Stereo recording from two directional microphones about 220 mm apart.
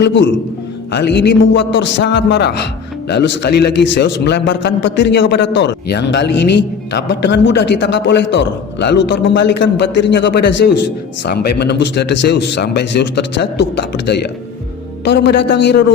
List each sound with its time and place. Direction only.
0.0 s a man's voice: 55° left (ahead or behind)